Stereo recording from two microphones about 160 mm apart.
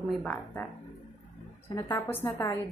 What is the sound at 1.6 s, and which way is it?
Speech, 30° left (ahead or behind).